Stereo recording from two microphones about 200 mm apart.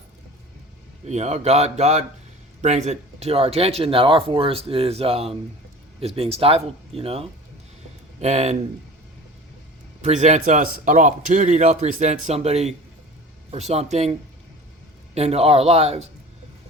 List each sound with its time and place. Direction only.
1.0 s a man's voice: 35° right (ahead or behind)
10.0 s a man's voice: 35° right (ahead or behind)